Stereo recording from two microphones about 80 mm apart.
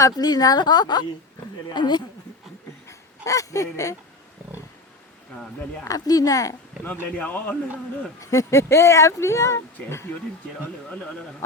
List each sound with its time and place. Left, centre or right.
0.0 s a woman's voice: left
2.8 s a sound: left
5.9 s a woman's voice: left
6.8 s speech: left
8.2 s speech: left